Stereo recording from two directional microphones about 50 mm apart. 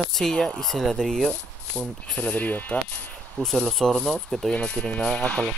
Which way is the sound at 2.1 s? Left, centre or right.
Left.